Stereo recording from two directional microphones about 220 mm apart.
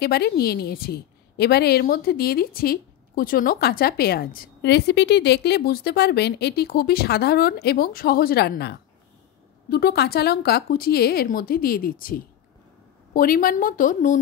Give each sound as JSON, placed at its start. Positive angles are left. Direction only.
{"t": 0.0, "sound": "a woman's voice", "side_deg": 45}